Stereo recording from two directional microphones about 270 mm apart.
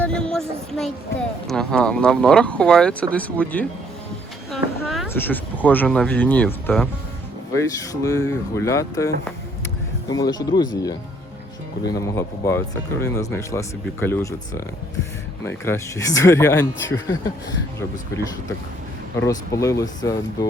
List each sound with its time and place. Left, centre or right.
0.0 s a sound: centre
1.5 s speech: centre
11.9 s speech: centre
19.2 s speech: centre